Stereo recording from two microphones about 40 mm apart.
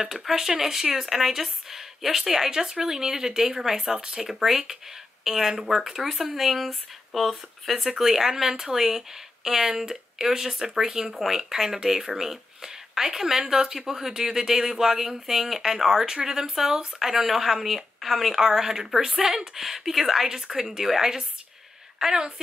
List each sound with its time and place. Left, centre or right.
0.0 s speech: centre